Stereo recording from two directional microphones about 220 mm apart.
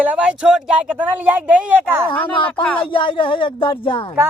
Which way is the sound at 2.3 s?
20° left (ahead or behind).